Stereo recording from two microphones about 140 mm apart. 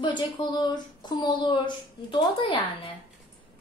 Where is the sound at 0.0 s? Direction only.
30° left (ahead or behind).